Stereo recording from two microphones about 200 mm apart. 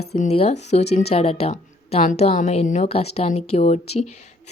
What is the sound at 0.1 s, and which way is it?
A woman's voice, 35° left (ahead or behind).